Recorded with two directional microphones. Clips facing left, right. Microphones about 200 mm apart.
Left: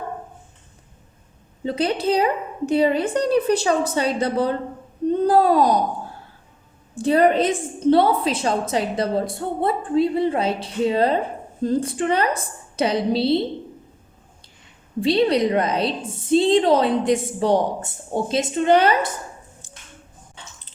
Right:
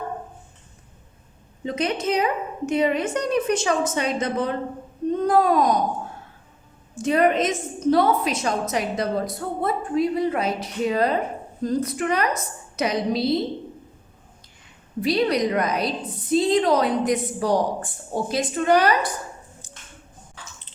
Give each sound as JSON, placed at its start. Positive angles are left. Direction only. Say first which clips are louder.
{"t": 1.6, "sound": "a woman's voice", "louder": "left 3 dB", "side_deg": 30}
{"t": 6.9, "sound": "a woman's voice", "louder": "left 3 dB", "side_deg": 30}
{"t": 15.0, "sound": "a woman's voice", "louder": "left 3 dB", "side_deg": 30}
{"t": 20.4, "sound": "chewing", "louder": "even", "side_deg": 25}